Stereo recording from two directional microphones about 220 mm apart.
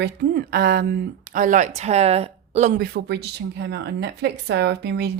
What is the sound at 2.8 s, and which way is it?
A woman's voice, 45° right (ahead or behind).